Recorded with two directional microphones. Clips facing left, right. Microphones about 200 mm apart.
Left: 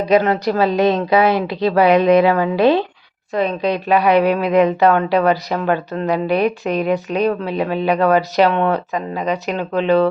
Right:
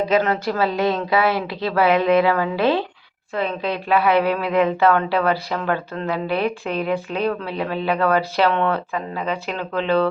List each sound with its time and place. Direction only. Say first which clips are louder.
0.4 s speech: left 5 dB; 20° left (ahead or behind)